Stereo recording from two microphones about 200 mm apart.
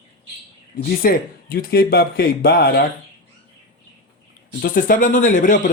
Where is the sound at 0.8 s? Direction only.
45° left (ahead or behind).